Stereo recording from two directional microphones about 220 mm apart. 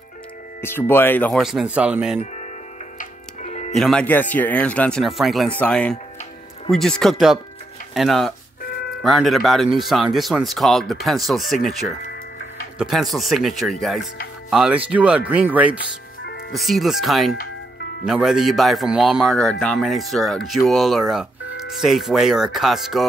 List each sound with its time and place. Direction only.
0.6 s speech: 10° left (ahead or behind); by 2.1 s 5° right (ahead or behind)
3.0 s music: 35° left (ahead or behind)
3.7 s speech: 5° left (ahead or behind)
12.7 s speech: centre (ahead or behind)